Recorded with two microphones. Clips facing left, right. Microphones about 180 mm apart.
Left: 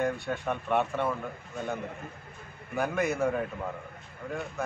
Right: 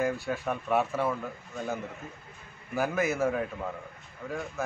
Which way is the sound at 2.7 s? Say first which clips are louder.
Right 1 dB; centre (ahead or behind).